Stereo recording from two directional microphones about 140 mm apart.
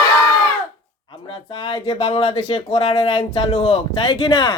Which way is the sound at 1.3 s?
40° left (ahead or behind).